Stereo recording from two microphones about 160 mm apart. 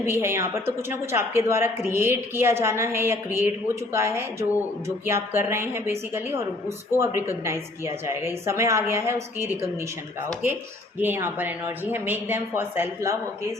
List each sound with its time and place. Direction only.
0.0 s a woman's voice: 15° right (ahead or behind)
11.0 s a woman's voice: 15° right (ahead or behind)